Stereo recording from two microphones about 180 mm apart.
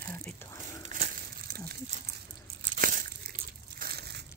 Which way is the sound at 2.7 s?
50° right (ahead or behind).